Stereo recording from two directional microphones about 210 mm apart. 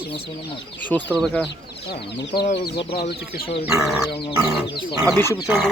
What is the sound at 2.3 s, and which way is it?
Speech, 50° left (ahead or behind).